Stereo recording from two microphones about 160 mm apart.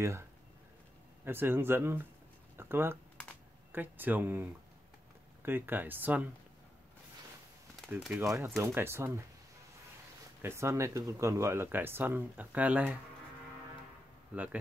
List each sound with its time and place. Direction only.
0.0 s speech: 15° right (ahead or behind)
7.8 s a sound: 5° left (ahead or behind)
8.2 s speech: 20° right (ahead or behind)
10.4 s speech: 15° right (ahead or behind)
14.3 s speech: 10° right (ahead or behind)